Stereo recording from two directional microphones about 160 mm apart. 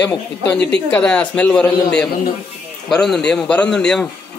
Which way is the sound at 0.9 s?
10° left (ahead or behind).